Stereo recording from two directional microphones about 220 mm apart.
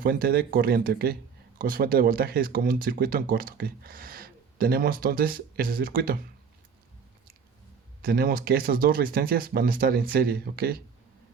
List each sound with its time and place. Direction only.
0.0 s speech: 40° right (ahead or behind)
8.0 s speech: 40° right (ahead or behind)